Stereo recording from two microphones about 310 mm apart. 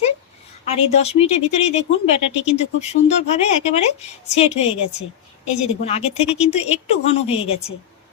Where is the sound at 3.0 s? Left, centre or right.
Left.